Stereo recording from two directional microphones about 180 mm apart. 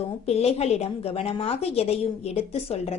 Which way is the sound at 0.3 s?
35° left (ahead or behind).